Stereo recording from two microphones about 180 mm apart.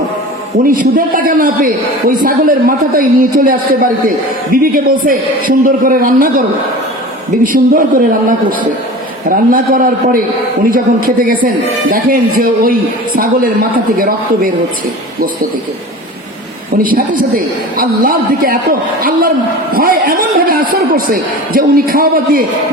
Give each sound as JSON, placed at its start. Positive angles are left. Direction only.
{"t": 0.5, "sound": "a man's voice", "side_deg": -50}
{"t": 7.4, "sound": "a man's voice", "side_deg": -50}
{"t": 9.3, "sound": "a man's voice", "side_deg": -50}
{"t": 16.8, "sound": "a man's voice", "side_deg": -50}